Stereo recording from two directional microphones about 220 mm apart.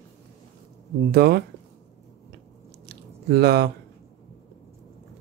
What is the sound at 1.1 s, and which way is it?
Speech, 45° right (ahead or behind).